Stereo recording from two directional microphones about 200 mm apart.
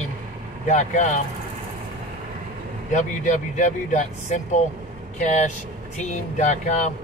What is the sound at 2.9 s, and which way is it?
Speech, 40° left (ahead or behind).